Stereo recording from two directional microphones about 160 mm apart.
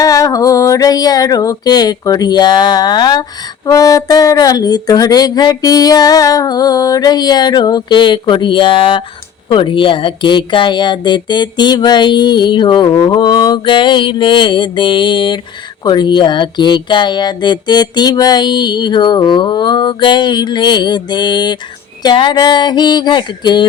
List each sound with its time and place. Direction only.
0.0 s female singing: 20° left (ahead or behind)
3.7 s speech: 20° left (ahead or behind)